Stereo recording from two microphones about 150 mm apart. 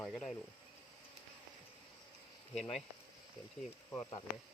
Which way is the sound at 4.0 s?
30° left (ahead or behind).